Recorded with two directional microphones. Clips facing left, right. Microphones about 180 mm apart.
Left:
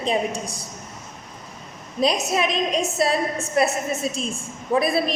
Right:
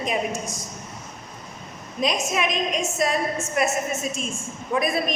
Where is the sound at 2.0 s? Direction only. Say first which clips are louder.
Left 3 dB; 35° left (ahead or behind).